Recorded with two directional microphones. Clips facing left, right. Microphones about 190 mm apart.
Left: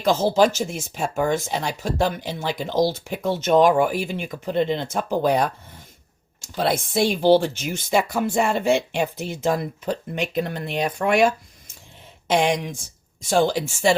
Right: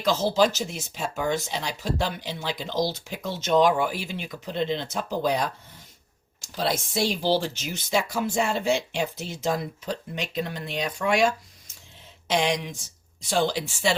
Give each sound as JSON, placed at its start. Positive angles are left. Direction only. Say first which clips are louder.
{"t": 0.0, "sound": "speech", "louder": "left 4 dB", "side_deg": 50}
{"t": 12.3, "sound": "speech", "louder": "left 4 dB", "side_deg": 50}